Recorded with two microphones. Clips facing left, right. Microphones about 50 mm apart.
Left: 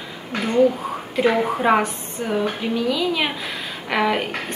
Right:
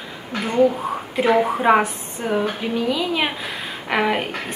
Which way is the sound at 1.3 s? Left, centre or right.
Centre.